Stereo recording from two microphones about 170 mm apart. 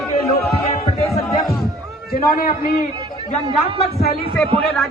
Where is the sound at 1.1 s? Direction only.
Centre (ahead or behind).